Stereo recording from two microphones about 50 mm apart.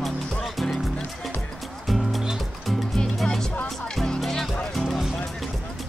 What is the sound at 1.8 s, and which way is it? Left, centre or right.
Music, centre.